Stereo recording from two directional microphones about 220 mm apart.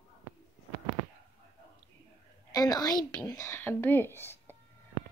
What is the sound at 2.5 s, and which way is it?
A woman's voice, 15° left (ahead or behind).